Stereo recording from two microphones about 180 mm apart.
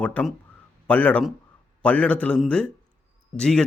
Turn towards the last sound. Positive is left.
turn(degrees=5)  # may be behind; listen again after turning